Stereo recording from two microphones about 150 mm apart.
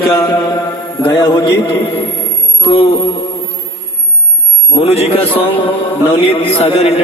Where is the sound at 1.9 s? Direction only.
40° left (ahead or behind).